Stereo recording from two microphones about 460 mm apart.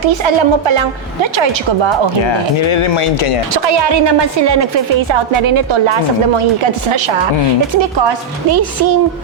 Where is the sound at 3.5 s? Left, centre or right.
Right.